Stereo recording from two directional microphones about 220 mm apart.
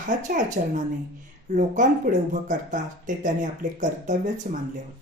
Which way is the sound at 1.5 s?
35° right (ahead or behind).